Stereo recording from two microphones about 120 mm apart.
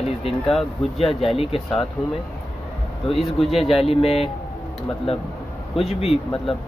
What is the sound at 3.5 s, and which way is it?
Speech, 55° left (ahead or behind).